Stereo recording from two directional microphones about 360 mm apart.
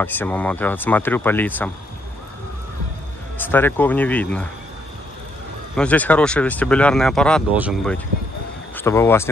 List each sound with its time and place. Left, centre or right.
0.0 s speech: centre
3.3 s speech: centre
5.8 s speech: centre